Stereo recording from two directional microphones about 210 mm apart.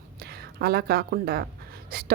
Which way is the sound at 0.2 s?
50° right (ahead or behind).